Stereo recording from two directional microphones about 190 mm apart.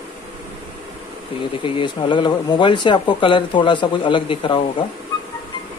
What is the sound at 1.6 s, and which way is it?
Speech, 25° left (ahead or behind).